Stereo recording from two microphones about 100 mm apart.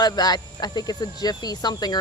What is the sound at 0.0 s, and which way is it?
Speech, 45° left (ahead or behind).